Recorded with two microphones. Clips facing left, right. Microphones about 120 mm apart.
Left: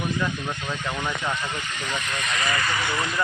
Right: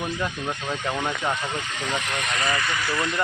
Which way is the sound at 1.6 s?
90° right.